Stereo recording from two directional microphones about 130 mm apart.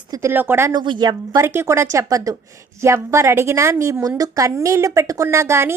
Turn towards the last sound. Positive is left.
turn(degrees=-20)  # may be behind; listen again after turning